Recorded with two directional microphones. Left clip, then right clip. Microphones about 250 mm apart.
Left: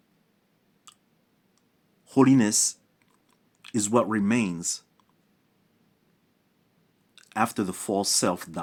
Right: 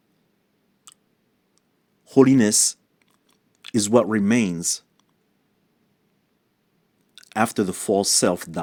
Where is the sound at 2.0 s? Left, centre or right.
Centre.